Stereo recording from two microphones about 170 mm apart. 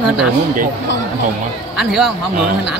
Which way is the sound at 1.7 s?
Centre (ahead or behind).